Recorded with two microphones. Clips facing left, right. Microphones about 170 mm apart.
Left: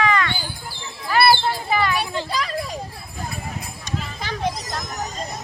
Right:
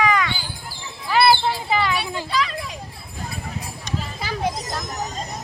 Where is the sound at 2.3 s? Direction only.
45° left (ahead or behind).